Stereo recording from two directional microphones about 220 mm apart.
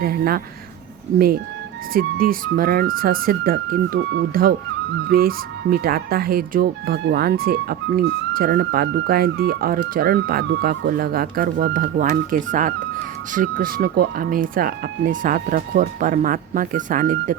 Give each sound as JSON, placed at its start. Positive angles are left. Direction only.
{"t": 0.0, "sound": "speech", "side_deg": -45}
{"t": 1.9, "sound": "speech", "side_deg": -40}